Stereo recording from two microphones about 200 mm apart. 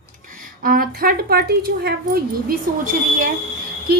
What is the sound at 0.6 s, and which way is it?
Speech, 45° right (ahead or behind).